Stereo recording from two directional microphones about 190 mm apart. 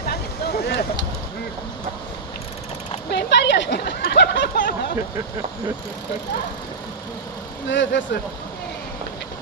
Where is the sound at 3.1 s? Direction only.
65° left (ahead or behind).